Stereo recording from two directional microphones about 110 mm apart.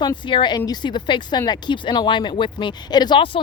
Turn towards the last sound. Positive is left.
turn(degrees=45)  # may be behind; listen again after turning